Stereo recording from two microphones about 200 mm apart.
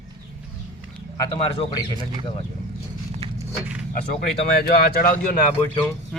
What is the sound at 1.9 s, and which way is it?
Speech, 20° right (ahead or behind).